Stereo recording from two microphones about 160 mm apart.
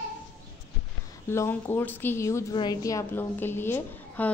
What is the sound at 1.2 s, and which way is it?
A woman's voice, 15° left (ahead or behind).